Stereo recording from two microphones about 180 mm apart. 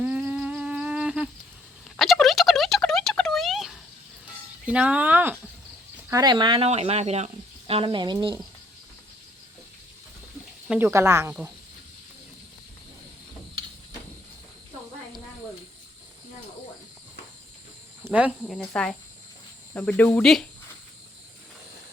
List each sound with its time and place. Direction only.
0.0 s music: 5° right (ahead or behind)
2.0 s a sound: centre (ahead or behind)
4.6 s speech: 5° right (ahead or behind)
6.1 s speech: 20° right (ahead or behind)
10.7 s speech: 10° right (ahead or behind)
18.0 s speech: 5° right (ahead or behind)